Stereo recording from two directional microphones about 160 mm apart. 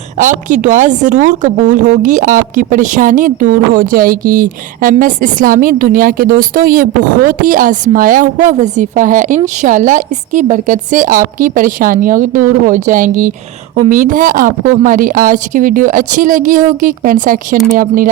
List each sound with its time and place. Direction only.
0.2 s a woman's voice: 55° right (ahead or behind)